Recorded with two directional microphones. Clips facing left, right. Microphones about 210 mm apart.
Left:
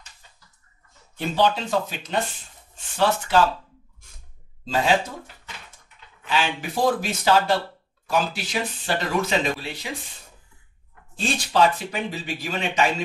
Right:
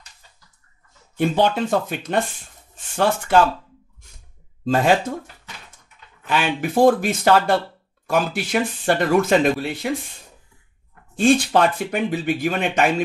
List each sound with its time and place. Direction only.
1.1 s speech: 55° right (ahead or behind)
3.3 s speech: 55° right (ahead or behind)
4.6 s speech: 55° right (ahead or behind)
11.1 s speech: 55° right (ahead or behind)